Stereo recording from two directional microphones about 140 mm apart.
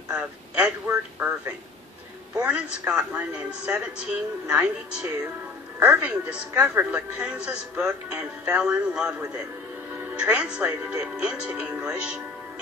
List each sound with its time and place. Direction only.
0.1 s a woman's voice: 5° right (ahead or behind)
2.4 s a woman's voice: 5° right (ahead or behind)